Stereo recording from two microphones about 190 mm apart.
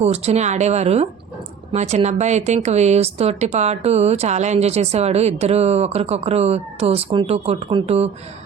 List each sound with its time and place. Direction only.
0.0 s speech: 35° right (ahead or behind)